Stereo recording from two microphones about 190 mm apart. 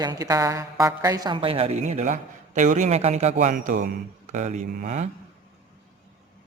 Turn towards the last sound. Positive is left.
turn(degrees=-40)  # may be behind; listen again after turning